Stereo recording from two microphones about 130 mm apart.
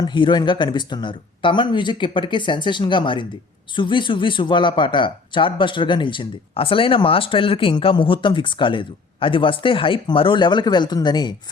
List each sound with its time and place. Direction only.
0.0 s speech: 35° left (ahead or behind)